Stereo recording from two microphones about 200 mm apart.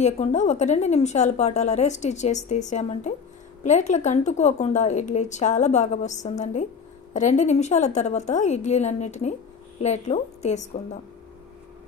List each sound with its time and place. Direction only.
0.0 s a woman's voice: 35° left (ahead or behind)